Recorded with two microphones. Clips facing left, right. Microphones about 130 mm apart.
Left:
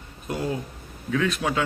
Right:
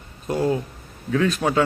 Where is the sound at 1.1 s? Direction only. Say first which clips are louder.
Right 4 dB; 35° right (ahead or behind).